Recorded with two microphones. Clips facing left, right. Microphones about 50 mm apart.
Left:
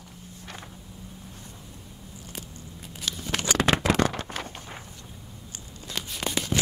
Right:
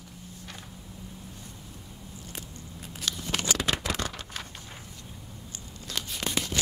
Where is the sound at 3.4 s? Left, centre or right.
Left.